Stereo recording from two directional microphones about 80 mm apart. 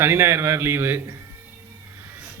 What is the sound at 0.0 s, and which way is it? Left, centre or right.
A man's voice, right.